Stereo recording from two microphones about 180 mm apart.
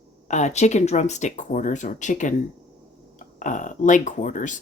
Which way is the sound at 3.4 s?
45° left (ahead or behind).